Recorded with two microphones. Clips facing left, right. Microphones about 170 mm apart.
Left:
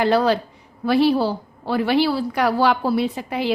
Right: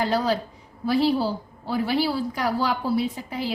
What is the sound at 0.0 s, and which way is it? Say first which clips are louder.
A woman's voice: left 5 dB; 70° left (ahead or behind).